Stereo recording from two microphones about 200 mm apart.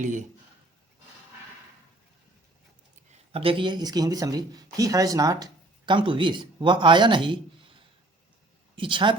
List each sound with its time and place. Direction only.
0.0 s a man's voice: 40° right (ahead or behind)
3.1 s speech: 30° right (ahead or behind)
8.7 s speech: 25° right (ahead or behind)